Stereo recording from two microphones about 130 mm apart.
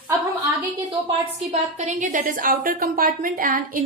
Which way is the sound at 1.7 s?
70° right (ahead or behind).